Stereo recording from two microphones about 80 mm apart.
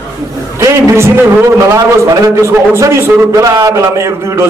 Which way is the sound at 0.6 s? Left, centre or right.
Right.